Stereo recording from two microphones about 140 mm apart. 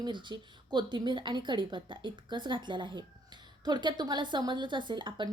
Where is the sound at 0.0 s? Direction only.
35° right (ahead or behind).